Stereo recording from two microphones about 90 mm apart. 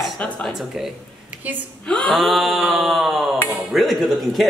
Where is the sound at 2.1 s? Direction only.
Centre (ahead or behind).